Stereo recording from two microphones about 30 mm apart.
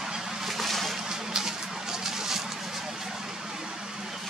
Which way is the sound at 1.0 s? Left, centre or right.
Centre.